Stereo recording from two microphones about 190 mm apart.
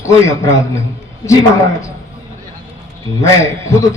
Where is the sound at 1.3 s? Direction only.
15° left (ahead or behind).